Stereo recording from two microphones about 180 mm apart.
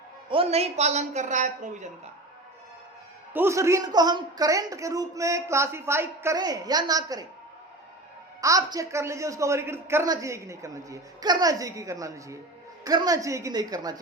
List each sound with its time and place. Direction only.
0.3 s a woman's voice: 30° right (ahead or behind)
3.3 s a man's voice: 15° right (ahead or behind)
8.4 s a man's voice: 20° right (ahead or behind)